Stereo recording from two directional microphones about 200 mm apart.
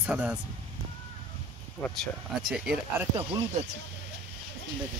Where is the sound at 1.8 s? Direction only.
Centre (ahead or behind).